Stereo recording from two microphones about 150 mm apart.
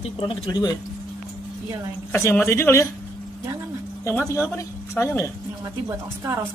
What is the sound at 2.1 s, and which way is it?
Speech, 15° left (ahead or behind).